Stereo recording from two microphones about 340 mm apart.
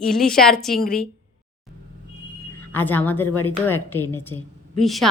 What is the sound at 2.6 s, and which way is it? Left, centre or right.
A woman's voice, centre.